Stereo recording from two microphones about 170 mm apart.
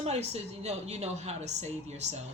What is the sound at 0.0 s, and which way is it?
A woman's voice, 40° right (ahead or behind).